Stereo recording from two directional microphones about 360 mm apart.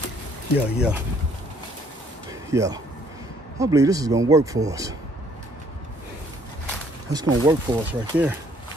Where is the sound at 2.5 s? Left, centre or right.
Centre.